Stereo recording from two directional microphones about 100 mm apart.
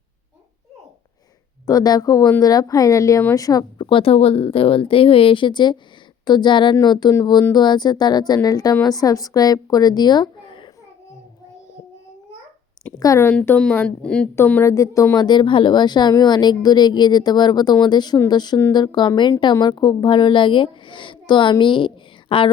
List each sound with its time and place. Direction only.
1.6 s a woman's voice: 40° left (ahead or behind)
3.8 s a woman's voice: 60° left (ahead or behind)
13.0 s speech: 35° left (ahead or behind)
13.3 s speech: 15° left (ahead or behind)
14.3 s a woman's voice: 20° left (ahead or behind)
15.3 s a woman's voice: 55° left (ahead or behind)